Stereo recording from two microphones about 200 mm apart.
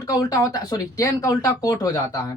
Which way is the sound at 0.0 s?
15° left (ahead or behind).